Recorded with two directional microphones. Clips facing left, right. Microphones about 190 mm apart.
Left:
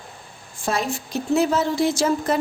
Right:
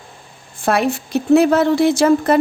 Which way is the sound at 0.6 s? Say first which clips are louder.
Right 7 dB; 65° right (ahead or behind).